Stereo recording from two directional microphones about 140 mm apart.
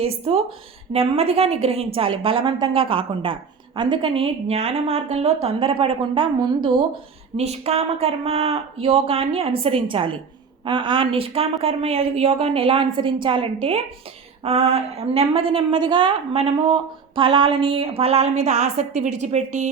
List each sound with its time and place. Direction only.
0.3 s a woman's voice: 50° right (ahead or behind)